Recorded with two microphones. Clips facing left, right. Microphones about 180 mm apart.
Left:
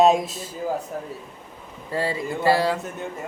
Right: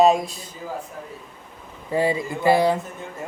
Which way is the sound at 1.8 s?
15° right (ahead or behind).